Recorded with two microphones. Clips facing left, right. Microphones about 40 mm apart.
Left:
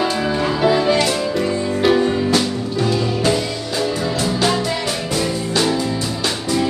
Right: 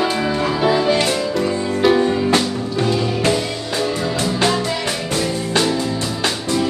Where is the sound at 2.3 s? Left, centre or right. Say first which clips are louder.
Right 1 dB; right.